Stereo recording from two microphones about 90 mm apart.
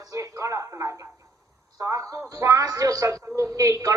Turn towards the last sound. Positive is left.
turn(degrees=-35)  # may be behind; listen again after turning